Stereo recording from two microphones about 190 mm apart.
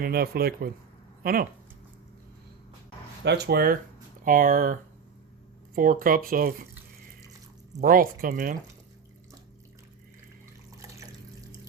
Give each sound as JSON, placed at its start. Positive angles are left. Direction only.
{"t": 0.0, "sound": "speech", "side_deg": -55}
{"t": 3.2, "sound": "speech", "side_deg": -60}
{"t": 7.8, "sound": "speech", "side_deg": -45}
{"t": 10.8, "sound": "drip", "side_deg": -15}